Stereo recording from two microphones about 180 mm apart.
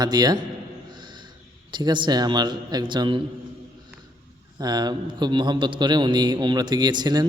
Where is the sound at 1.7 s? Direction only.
25° right (ahead or behind).